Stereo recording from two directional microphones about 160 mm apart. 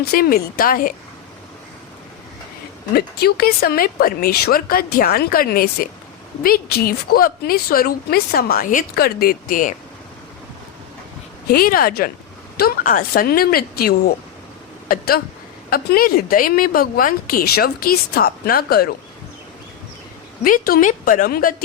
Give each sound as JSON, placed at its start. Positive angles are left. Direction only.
{"t": 0.1, "sound": "a woman's voice", "side_deg": 70}
{"t": 2.9, "sound": "a woman's voice", "side_deg": 80}
{"t": 11.4, "sound": "a woman's voice", "side_deg": 65}
{"t": 20.4, "sound": "a woman's voice", "side_deg": 65}